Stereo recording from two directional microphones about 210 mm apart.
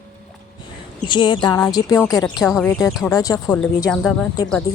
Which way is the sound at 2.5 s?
Centre (ahead or behind).